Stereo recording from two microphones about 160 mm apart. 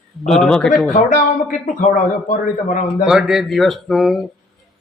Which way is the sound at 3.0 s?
5° right (ahead or behind).